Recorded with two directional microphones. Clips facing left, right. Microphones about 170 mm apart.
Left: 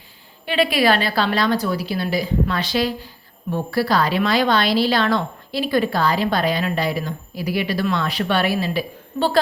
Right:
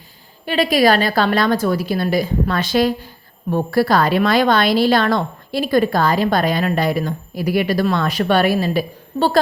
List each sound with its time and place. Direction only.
0.4 s a woman's voice: 40° right (ahead or behind)